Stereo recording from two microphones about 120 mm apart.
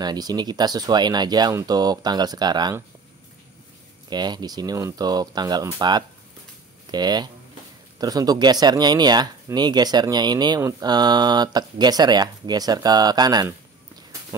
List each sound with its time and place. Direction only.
0.0 s speech: 35° right (ahead or behind)
4.1 s speech: 35° right (ahead or behind)